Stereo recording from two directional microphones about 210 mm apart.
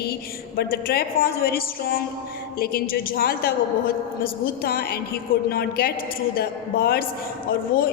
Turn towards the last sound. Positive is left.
turn(degrees=45)  # may be behind; listen again after turning